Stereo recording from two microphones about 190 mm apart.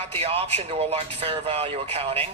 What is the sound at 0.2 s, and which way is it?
Speech, 30° right (ahead or behind).